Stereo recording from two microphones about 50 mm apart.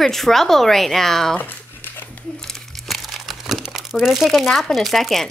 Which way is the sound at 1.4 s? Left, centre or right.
Left.